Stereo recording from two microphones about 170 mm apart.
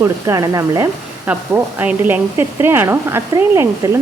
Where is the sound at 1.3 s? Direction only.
10° right (ahead or behind).